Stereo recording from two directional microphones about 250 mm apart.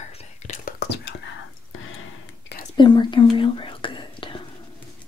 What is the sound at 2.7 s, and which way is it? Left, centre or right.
Whispering, centre.